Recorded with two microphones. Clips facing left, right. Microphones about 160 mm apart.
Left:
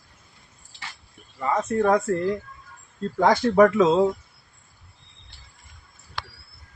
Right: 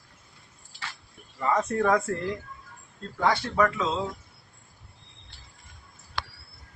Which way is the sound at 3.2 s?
40° left (ahead or behind).